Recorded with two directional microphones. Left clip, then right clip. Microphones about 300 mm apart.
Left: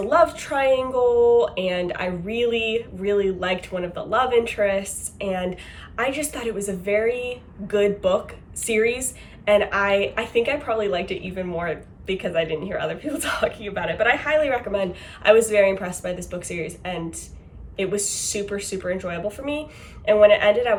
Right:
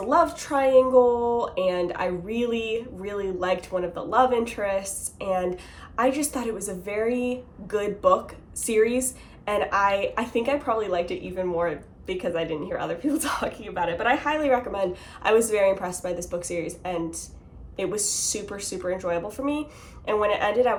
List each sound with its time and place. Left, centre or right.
0.0 s speech: centre